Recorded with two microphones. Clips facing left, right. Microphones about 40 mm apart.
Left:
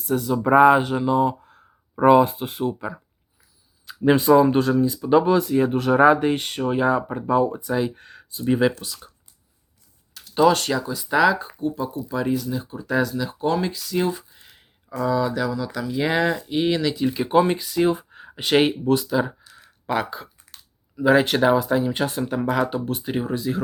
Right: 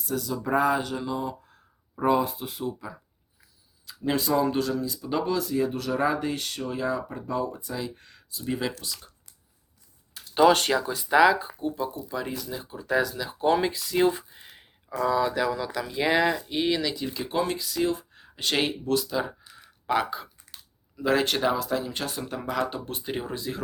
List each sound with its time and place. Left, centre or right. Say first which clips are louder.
0.1 s speech: left 8 dB; left
2.0 s speech: left 9 dB; left
3.8 s speech: left 10 dB; left
7.9 s a sound: left 8 dB; left
8.4 s speech: left 10 dB; left
8.7 s speech: left 2 dB; centre
10.3 s speech: left 1 dB; right
11.1 s speech: left 1 dB; centre
15.7 s speech: left 2 dB; centre